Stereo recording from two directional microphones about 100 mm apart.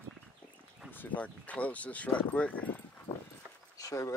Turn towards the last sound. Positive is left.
turn(degrees=30)  # may be behind; listen again after turning